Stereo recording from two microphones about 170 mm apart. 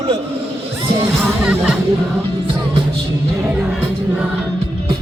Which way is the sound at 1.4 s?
5° right (ahead or behind).